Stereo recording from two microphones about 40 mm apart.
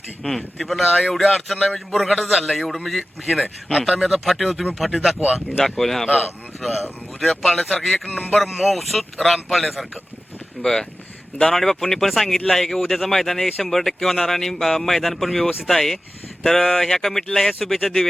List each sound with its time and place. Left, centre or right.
0.2 s a man's voice: centre
3.4 s speech: left
3.8 s a man's voice: centre
10.6 s speech: centre
17.6 s a man's voice: centre